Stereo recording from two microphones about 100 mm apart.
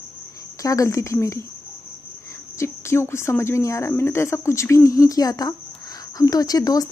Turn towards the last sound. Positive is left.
turn(degrees=40)  # may be behind; listen again after turning